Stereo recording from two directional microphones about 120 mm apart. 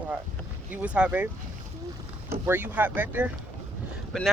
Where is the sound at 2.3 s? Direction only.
15° right (ahead or behind).